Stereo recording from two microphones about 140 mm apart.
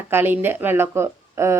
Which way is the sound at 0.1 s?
15° right (ahead or behind).